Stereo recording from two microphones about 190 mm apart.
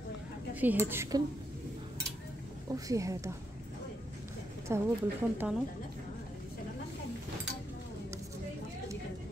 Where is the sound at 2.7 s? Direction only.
15° right (ahead or behind).